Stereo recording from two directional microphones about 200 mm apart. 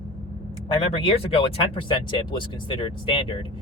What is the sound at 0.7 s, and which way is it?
Speech, 30° left (ahead or behind).